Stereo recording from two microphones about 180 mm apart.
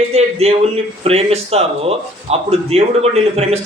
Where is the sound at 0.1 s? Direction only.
35° right (ahead or behind).